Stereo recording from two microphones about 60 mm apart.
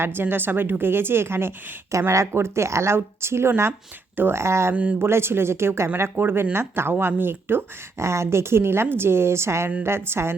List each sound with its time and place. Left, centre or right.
0.0 s speech: right
1.9 s a woman's voice: right
4.7 s speech: right
4.9 s a woman's voice: right
7.9 s a woman's voice: right